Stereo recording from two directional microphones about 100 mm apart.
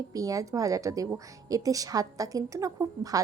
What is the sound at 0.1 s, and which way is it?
A woman's voice, 35° right (ahead or behind).